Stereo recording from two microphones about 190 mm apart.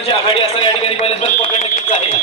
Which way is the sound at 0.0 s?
30° left (ahead or behind).